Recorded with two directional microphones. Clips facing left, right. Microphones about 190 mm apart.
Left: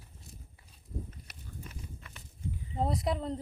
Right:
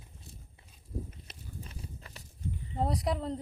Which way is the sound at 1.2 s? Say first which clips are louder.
Right 1 dB; 30° right (ahead or behind).